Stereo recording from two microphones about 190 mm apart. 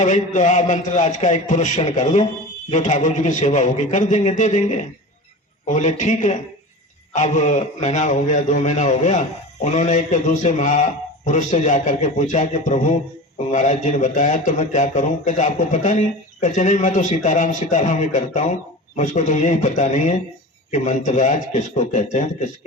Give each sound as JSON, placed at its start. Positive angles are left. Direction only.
{"t": 0.0, "sound": "a man's voice", "side_deg": 40}